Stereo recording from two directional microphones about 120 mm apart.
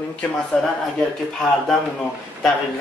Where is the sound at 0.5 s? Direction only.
5° left (ahead or behind).